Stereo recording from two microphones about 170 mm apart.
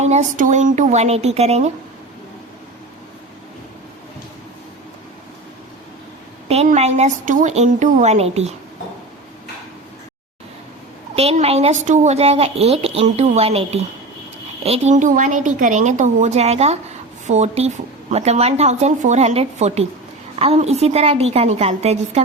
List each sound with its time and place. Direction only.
0.0 s speech: 45° right (ahead or behind)
6.5 s speech: 40° right (ahead or behind)
11.1 s a woman's voice: 35° right (ahead or behind)